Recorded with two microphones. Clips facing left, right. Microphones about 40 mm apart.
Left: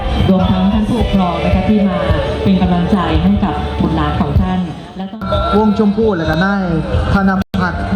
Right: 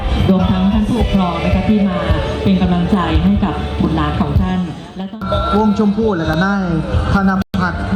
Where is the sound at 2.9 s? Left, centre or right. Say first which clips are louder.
Left 1 dB; centre.